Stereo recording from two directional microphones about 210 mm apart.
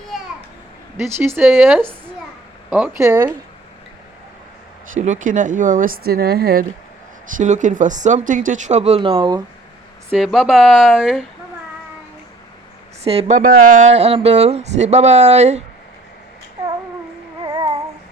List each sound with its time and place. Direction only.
0.1 s a sound: centre (ahead or behind)
1.4 s speech: 10° right (ahead or behind)
2.6 s speech: 5° right (ahead or behind)
4.9 s speech: 35° right (ahead or behind)
10.2 s speech: centre (ahead or behind)
13.1 s speech: 30° right (ahead or behind)
17.4 s child singing: 20° right (ahead or behind)